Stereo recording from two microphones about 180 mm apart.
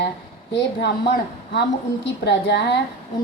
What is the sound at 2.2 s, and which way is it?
Speech, 70° left (ahead or behind).